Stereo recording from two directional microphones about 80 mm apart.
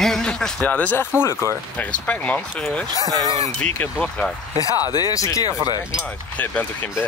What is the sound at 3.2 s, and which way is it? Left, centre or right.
Speech, left.